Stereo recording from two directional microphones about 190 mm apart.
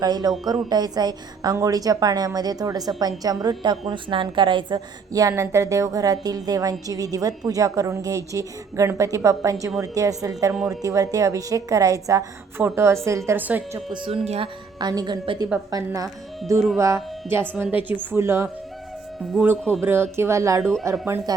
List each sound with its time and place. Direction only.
0.0 s a woman's voice: 20° right (ahead or behind)
13.9 s a woman's voice: 30° right (ahead or behind)
16.7 s a woman's voice: 15° right (ahead or behind)
17.7 s a woman's voice: 25° left (ahead or behind)
18.0 s a woman's voice: 10° right (ahead or behind)